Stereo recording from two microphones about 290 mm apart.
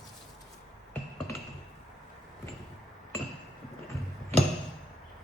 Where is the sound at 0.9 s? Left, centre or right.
Centre.